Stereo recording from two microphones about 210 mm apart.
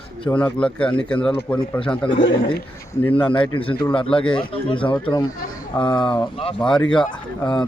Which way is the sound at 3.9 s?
25° left (ahead or behind).